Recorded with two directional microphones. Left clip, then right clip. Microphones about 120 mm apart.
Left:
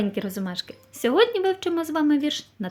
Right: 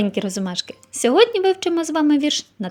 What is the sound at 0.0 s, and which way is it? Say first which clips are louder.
A woman's voice: right 5 dB; 50° right (ahead or behind).